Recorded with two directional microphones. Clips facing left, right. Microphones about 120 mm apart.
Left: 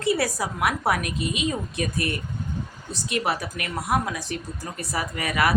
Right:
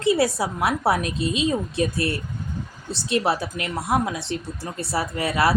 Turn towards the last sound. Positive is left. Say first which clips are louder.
# right 3 dB
turn(degrees=-30)  # may be behind; listen again after turning